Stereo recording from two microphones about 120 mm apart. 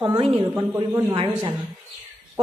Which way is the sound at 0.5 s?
25° right (ahead or behind).